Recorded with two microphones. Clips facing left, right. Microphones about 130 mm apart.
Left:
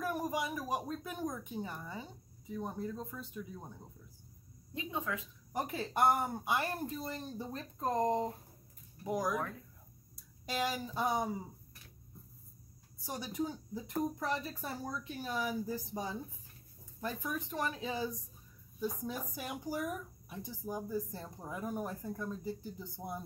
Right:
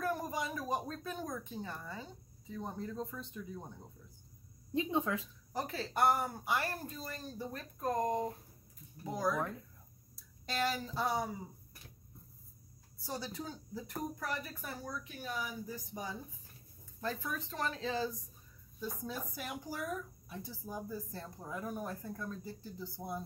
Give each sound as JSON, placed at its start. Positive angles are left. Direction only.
{"t": 0.0, "sound": "speech", "side_deg": 15}
{"t": 4.7, "sound": "speech", "side_deg": -30}
{"t": 5.5, "sound": "speech", "side_deg": 15}
{"t": 10.4, "sound": "speech", "side_deg": 15}
{"t": 13.0, "sound": "speech", "side_deg": 15}
{"t": 17.0, "sound": "speech", "side_deg": 15}